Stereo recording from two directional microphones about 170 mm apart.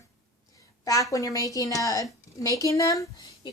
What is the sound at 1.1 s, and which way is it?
A woman's voice, 20° left (ahead or behind).